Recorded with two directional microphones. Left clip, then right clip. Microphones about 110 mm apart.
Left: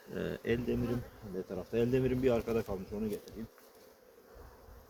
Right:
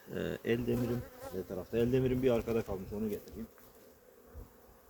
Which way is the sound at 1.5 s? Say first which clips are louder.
Even; 20° right (ahead or behind).